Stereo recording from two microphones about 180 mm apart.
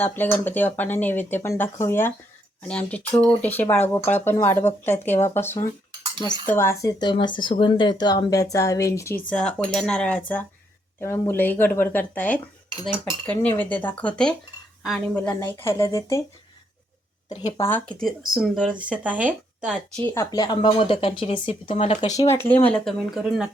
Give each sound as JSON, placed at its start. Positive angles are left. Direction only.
{"t": 0.0, "sound": "speech", "side_deg": 10}
{"t": 9.3, "sound": "speech", "side_deg": 5}
{"t": 17.6, "sound": "speech", "side_deg": 10}
{"t": 19.7, "sound": "speech", "side_deg": 10}
{"t": 20.3, "sound": "speech", "side_deg": 25}
{"t": 22.3, "sound": "speech", "side_deg": 10}